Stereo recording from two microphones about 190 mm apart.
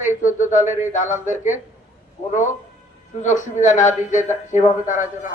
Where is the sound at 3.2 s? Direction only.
40° left (ahead or behind).